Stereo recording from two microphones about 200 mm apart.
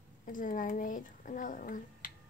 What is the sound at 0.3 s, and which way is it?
A child's voice, 40° left (ahead or behind).